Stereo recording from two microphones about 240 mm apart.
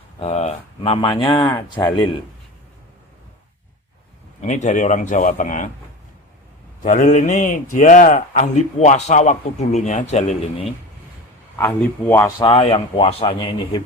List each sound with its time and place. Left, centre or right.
0.2 s speech: left
4.4 s a man's voice: left
6.8 s a man's voice: left
11.5 s speech: centre
12.4 s speech: left